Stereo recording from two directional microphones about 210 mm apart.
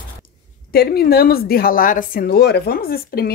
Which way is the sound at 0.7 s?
50° left (ahead or behind).